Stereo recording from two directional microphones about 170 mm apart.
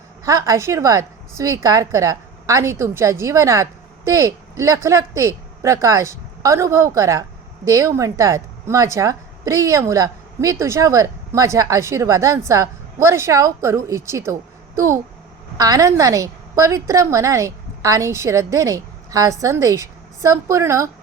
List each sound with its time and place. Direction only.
0.3 s a woman's voice: 20° right (ahead or behind)
15.5 s a woman's voice: 20° right (ahead or behind)